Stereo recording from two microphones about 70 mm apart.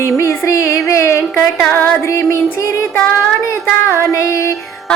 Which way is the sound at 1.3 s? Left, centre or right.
Left.